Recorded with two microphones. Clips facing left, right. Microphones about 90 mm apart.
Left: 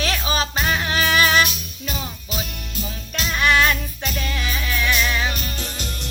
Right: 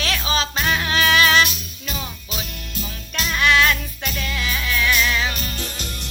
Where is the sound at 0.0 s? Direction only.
20° left (ahead or behind).